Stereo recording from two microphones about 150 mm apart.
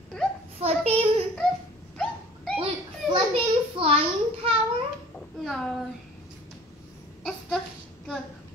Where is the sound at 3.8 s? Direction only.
35° right (ahead or behind).